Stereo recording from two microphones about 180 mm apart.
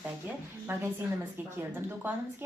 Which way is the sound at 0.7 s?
10° right (ahead or behind).